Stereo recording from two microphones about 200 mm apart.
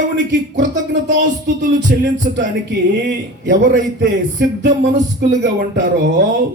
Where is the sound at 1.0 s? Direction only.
40° right (ahead or behind).